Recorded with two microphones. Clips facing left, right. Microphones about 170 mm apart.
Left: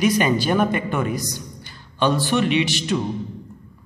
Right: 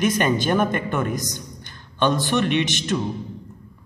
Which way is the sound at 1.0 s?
45° right (ahead or behind).